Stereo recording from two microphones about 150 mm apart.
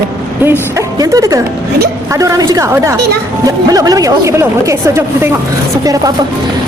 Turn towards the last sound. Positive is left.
turn(degrees=-25)  # may be behind; listen again after turning